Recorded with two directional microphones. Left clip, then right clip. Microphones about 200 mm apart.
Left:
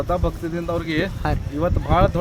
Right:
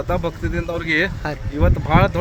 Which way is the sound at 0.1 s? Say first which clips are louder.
Right 1 dB; 15° right (ahead or behind).